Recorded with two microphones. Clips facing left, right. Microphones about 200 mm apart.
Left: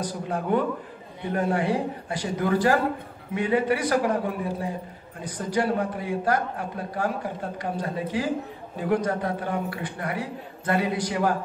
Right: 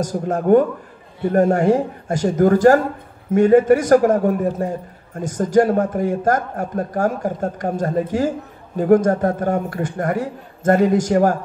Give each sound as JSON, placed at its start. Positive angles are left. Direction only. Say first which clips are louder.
{"t": 0.0, "sound": "a man's voice", "louder": "right 8 dB", "side_deg": -45}